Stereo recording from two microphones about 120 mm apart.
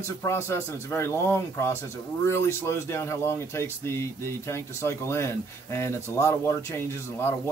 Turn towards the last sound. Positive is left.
turn(degrees=20)  # may be behind; listen again after turning